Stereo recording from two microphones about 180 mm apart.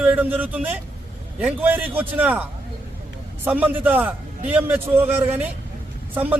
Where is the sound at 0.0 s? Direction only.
10° right (ahead or behind).